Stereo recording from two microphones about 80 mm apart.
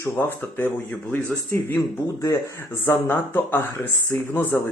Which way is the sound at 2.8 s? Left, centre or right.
Left.